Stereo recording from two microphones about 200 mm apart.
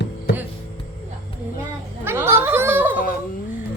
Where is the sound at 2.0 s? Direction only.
10° right (ahead or behind).